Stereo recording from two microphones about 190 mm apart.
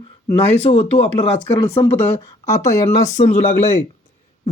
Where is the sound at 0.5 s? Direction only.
30° left (ahead or behind); by 3.1 s 15° left (ahead or behind).